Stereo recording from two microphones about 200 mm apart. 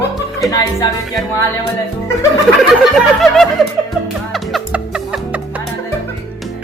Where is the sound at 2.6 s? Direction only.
Centre (ahead or behind).